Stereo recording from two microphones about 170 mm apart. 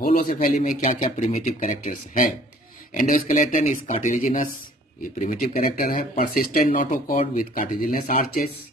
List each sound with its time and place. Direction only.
0.0 s speech: 55° left (ahead or behind)